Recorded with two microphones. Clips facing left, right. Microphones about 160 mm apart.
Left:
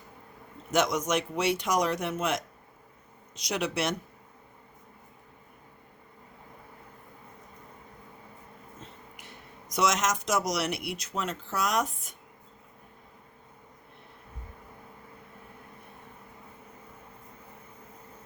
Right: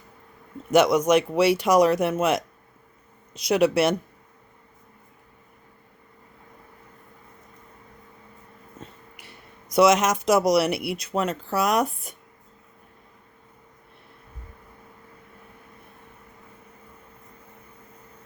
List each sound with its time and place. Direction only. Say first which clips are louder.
0.7 s speech: right 9 dB; 65° right (ahead or behind)
1.4 s speech: right 8 dB; 10° right (ahead or behind)
1.6 s speech: right 9 dB; 65° right (ahead or behind)
3.5 s speech: right 10 dB; 60° right (ahead or behind)
9.7 s speech: right 9 dB; 60° right (ahead or behind)
10.7 s speech: right 7 dB; 5° right (ahead or behind)
10.9 s speech: right 8 dB; 60° right (ahead or behind)